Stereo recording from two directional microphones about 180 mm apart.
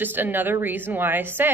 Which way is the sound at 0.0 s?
10° right (ahead or behind).